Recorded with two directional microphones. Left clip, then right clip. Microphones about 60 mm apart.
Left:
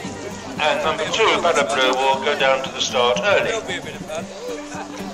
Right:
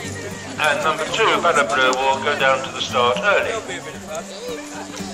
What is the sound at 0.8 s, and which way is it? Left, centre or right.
Speech, left.